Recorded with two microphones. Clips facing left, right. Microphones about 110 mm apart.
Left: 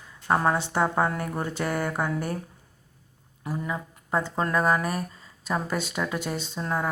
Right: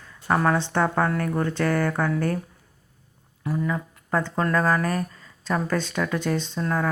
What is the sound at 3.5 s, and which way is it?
Speech, 15° left (ahead or behind).